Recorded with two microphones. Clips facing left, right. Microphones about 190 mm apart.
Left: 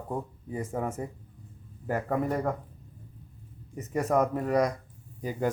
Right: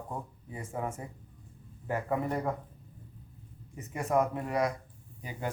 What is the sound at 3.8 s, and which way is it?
Speech, 40° left (ahead or behind).